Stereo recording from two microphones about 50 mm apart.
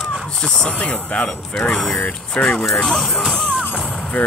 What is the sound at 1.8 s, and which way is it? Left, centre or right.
Speech, centre.